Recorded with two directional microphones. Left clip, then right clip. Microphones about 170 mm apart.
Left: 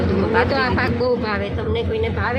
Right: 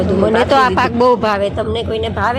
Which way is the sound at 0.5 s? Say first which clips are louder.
Right 8 dB; 55° right (ahead or behind).